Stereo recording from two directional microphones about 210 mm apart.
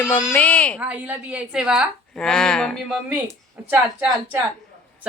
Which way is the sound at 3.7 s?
10° right (ahead or behind).